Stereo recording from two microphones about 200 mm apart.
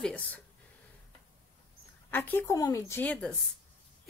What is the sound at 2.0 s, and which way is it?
A woman's voice, 10° left (ahead or behind).